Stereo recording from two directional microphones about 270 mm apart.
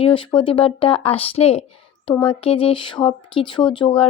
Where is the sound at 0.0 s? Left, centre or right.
Centre.